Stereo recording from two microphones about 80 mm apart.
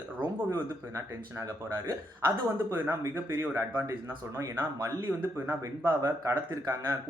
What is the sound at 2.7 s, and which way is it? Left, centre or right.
Speech, right.